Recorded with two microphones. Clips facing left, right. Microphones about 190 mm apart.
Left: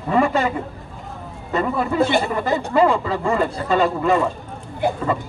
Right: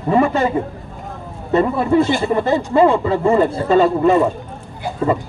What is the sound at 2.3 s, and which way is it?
Speech, 25° right (ahead or behind).